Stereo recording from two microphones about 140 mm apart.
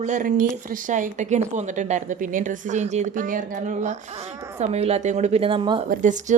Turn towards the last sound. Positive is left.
turn(degrees=-65)  # may be behind; listen again after turning